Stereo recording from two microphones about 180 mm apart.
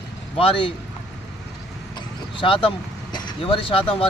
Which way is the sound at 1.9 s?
30° left (ahead or behind).